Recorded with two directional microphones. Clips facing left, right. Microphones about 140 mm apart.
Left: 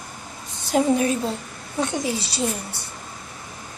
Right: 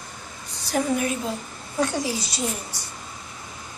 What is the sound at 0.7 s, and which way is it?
A woman's voice, 20° left (ahead or behind).